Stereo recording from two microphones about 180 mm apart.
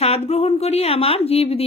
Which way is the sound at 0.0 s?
35° left (ahead or behind).